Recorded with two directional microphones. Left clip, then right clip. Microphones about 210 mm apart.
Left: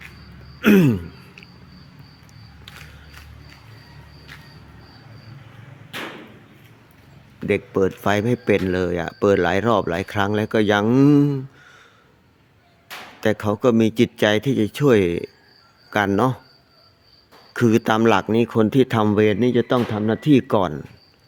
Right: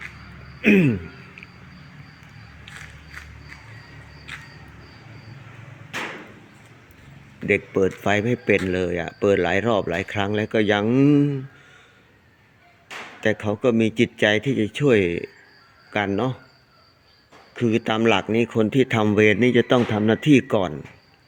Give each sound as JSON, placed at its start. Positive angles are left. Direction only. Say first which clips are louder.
{"t": 0.6, "sound": "speech", "louder": "left 2 dB", "side_deg": 20}
{"t": 7.3, "sound": "speech", "louder": "even", "side_deg": 10}
{"t": 10.2, "sound": "speech", "louder": "left 3 dB", "side_deg": 20}
{"t": 13.2, "sound": "speech", "louder": "left 2 dB", "side_deg": 15}
{"t": 17.5, "sound": "speech", "louder": "left 4 dB", "side_deg": 20}